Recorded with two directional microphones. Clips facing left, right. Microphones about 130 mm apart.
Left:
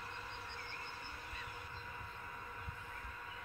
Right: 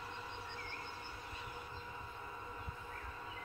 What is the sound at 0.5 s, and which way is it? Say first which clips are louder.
Train: right 2 dB; 5° right (ahead or behind).